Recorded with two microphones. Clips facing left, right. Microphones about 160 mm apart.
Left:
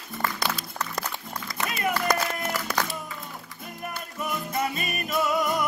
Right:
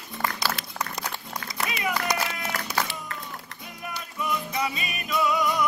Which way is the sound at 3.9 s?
50° left (ahead or behind).